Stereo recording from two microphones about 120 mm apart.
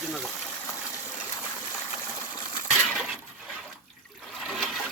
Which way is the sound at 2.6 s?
Centre (ahead or behind).